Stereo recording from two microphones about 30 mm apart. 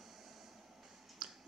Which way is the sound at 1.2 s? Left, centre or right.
Right.